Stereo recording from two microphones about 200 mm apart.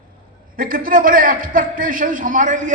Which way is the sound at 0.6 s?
45° right (ahead or behind).